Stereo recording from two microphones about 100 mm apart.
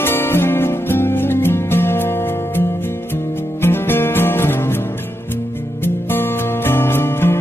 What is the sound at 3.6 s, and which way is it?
Music, 20° left (ahead or behind).